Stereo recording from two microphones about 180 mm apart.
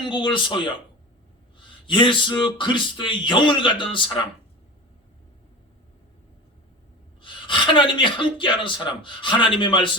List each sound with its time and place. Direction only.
0.1 s speech: 25° left (ahead or behind)
1.9 s speech: 25° left (ahead or behind)
7.2 s speech: 25° left (ahead or behind)